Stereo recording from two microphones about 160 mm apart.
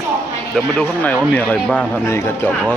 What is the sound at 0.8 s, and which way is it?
Speech, 10° left (ahead or behind).